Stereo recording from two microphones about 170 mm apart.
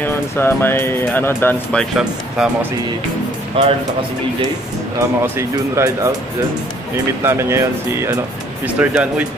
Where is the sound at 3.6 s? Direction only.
30° right (ahead or behind).